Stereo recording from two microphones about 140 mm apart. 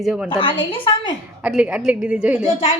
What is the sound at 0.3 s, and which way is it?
Speech, 35° left (ahead or behind).